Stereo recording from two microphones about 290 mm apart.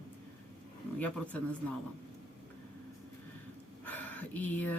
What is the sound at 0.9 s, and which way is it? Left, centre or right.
Speech, centre.